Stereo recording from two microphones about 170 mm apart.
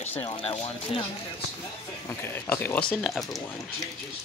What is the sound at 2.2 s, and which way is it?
Speech, 10° left (ahead or behind).